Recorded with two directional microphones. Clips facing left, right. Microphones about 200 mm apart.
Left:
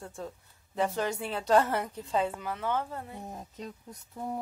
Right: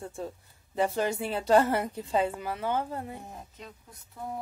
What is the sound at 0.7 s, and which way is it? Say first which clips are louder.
A woman's voice: right 2 dB; 10° right (ahead or behind).